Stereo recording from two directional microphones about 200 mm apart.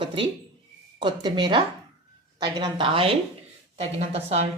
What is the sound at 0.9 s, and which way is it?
A woman's voice, 20° right (ahead or behind).